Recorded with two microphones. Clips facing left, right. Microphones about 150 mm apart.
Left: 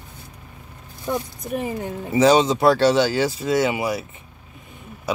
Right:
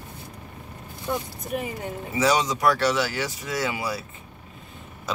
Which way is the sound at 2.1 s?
30° left (ahead or behind).